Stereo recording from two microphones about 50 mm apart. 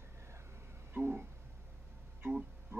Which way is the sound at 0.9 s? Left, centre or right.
Right.